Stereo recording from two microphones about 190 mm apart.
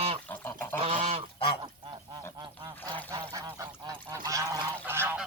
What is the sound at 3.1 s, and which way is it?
Goose, 15° right (ahead or behind).